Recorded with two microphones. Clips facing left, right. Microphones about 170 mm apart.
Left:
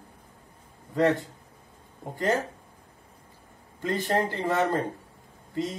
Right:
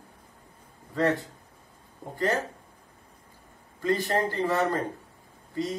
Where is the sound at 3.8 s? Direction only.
20° left (ahead or behind).